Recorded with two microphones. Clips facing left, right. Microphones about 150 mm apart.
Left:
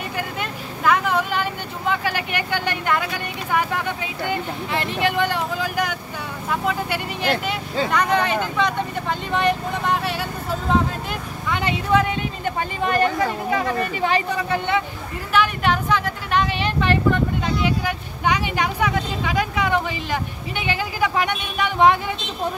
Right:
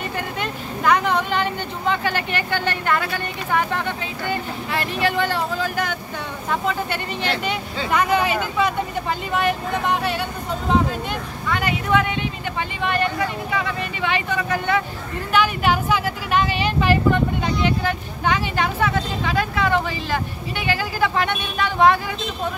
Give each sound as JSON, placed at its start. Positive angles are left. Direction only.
{"t": 0.4, "sound": "vehicle", "side_deg": 5}
{"t": 3.5, "sound": "speech", "side_deg": 10}
{"t": 4.7, "sound": "speech", "side_deg": 20}
{"t": 7.9, "sound": "speech", "side_deg": -5}
{"t": 11.9, "sound": "speech", "side_deg": 40}
{"t": 15.3, "sound": "speech", "side_deg": -5}
{"t": 17.6, "sound": "speech", "side_deg": 10}